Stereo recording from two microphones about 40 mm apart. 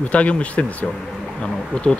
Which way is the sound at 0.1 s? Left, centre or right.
Left.